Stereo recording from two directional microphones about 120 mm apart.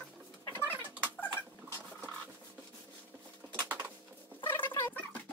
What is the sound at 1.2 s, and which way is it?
Rodents, 15° left (ahead or behind).